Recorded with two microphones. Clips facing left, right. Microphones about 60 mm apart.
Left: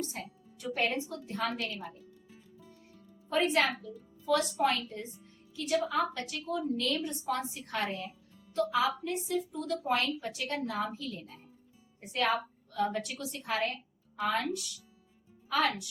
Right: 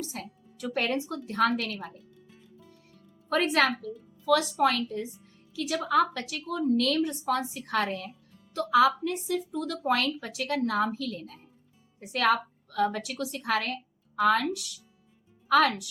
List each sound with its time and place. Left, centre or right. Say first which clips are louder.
0.0 s a woman's voice: right 1 dB; right
3.2 s a woman's voice: right 3 dB; right